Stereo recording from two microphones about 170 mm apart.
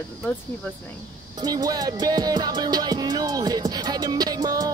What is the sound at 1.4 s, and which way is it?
Music, 20° right (ahead or behind).